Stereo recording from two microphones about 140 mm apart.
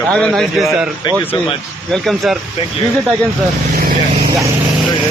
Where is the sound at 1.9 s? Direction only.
Centre (ahead or behind).